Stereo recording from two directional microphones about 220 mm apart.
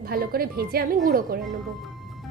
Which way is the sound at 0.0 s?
45° right (ahead or behind).